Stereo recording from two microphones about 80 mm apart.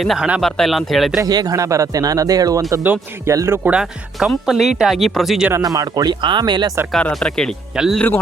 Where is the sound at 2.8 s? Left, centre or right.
Right.